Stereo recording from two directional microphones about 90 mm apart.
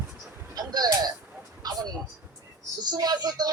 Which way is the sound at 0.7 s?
50° right (ahead or behind).